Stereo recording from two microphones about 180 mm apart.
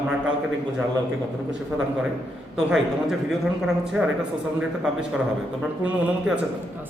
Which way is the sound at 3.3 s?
Centre (ahead or behind).